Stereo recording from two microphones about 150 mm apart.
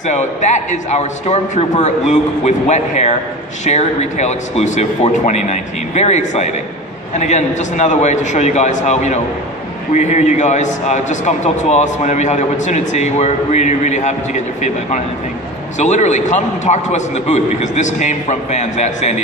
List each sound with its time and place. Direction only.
0.0 s a man's voice: 50° left (ahead or behind)